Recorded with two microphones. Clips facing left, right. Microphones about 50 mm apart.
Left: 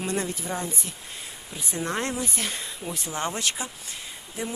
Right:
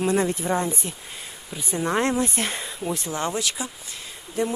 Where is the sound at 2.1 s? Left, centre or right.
Right.